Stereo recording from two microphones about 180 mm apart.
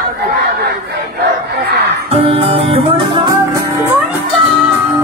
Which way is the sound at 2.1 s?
30° right (ahead or behind).